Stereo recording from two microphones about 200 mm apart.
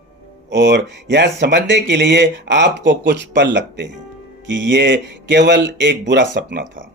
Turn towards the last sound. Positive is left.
turn(degrees=-65)  # may be behind; listen again after turning